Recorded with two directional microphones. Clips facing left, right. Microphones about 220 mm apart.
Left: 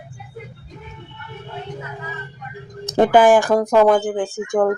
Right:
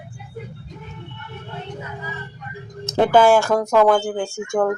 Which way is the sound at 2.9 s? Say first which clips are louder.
Left 2 dB; 15° left (ahead or behind).